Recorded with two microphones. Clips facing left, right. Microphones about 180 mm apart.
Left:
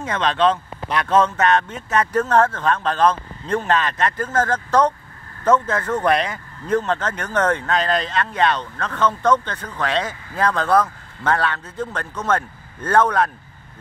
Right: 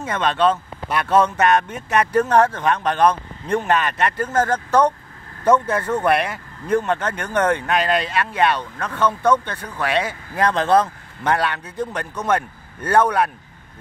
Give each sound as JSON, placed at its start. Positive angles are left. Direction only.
{"t": 0.0, "sound": "speech", "side_deg": -5}